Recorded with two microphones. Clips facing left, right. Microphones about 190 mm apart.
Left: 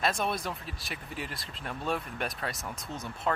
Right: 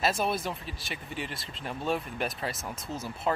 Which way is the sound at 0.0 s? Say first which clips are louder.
Right 2 dB; 5° right (ahead or behind).